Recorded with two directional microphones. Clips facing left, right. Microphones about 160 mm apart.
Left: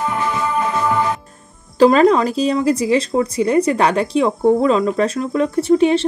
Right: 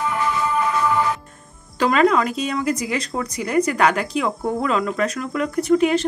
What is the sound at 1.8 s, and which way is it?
Speech, 30° left (ahead or behind).